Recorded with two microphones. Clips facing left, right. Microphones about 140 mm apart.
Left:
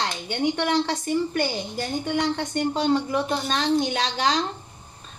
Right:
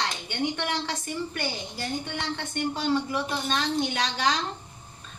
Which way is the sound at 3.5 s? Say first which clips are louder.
Left 5 dB; 30° left (ahead or behind).